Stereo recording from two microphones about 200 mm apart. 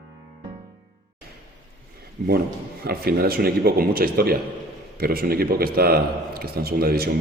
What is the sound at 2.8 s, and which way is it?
A man's voice, 50° right (ahead or behind).